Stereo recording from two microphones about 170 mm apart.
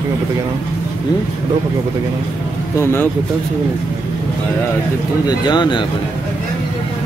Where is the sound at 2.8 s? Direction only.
15° left (ahead or behind).